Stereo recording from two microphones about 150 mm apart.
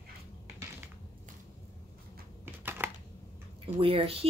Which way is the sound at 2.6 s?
15° right (ahead or behind).